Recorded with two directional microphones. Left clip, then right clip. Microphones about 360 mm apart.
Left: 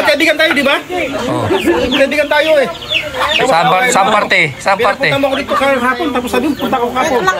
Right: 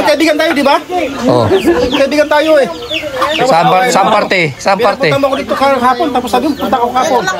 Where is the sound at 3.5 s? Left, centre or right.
Centre.